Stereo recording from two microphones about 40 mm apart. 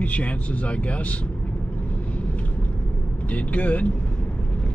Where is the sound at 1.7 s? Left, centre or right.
Left.